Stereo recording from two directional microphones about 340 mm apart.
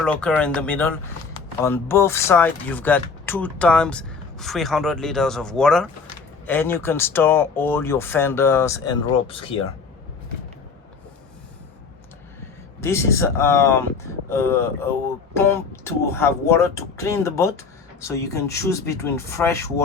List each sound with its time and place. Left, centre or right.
0.0 s speech: centre
12.8 s speech: centre